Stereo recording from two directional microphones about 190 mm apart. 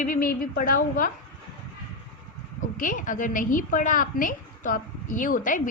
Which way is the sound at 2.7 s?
45° left (ahead or behind).